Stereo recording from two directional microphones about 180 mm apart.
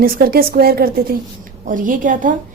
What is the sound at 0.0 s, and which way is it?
A woman's voice, 55° right (ahead or behind).